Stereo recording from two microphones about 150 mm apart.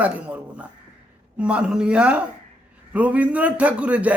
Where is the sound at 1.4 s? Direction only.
5° right (ahead or behind).